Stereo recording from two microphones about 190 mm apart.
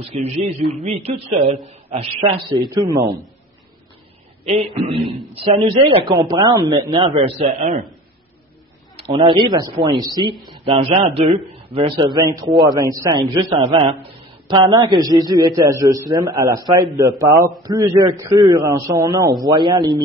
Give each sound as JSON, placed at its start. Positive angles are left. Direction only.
{"t": 0.1, "sound": "a woman's voice", "side_deg": -30}
{"t": 4.5, "sound": "a man's voice", "side_deg": -30}
{"t": 9.1, "sound": "a man's voice", "side_deg": -25}